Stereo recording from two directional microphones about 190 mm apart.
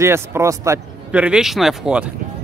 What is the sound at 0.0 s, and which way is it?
Speech, 15° right (ahead or behind).